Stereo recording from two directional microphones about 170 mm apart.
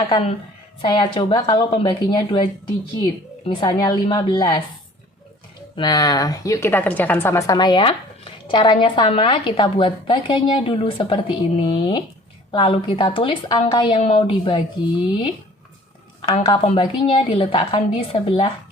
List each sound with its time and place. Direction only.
0.1 s a woman's voice: 35° left (ahead or behind)
5.7 s a woman's voice: 25° left (ahead or behind)
16.3 s a woman's voice: 30° left (ahead or behind)